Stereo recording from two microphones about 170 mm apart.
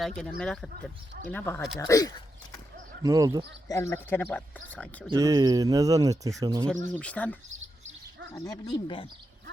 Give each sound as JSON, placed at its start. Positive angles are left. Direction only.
{"t": 0.0, "sound": "speech", "side_deg": 5}
{"t": 3.0, "sound": "speech", "side_deg": -20}
{"t": 3.7, "sound": "speech", "side_deg": 15}
{"t": 5.1, "sound": "speech", "side_deg": -20}
{"t": 6.9, "sound": "speech", "side_deg": 10}
{"t": 8.4, "sound": "speech", "side_deg": 25}